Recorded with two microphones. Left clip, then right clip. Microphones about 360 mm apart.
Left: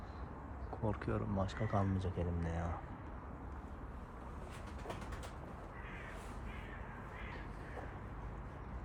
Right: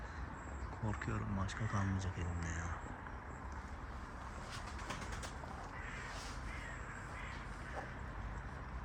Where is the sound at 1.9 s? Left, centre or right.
Left.